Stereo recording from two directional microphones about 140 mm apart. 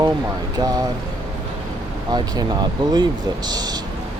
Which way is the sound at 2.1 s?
30° right (ahead or behind).